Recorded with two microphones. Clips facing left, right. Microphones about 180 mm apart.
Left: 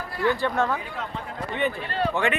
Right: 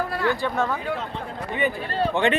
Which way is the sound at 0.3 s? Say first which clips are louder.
Even; 5° right (ahead or behind).